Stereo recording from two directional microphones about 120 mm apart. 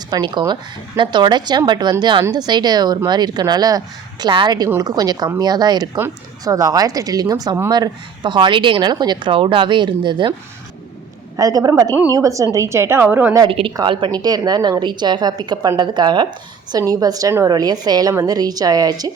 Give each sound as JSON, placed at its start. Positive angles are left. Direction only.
{"t": 0.1, "sound": "a woman's voice", "side_deg": -35}
{"t": 7.7, "sound": "a woman's voice", "side_deg": -40}
{"t": 11.3, "sound": "a woman's voice", "side_deg": -30}
{"t": 13.5, "sound": "a woman's voice", "side_deg": -50}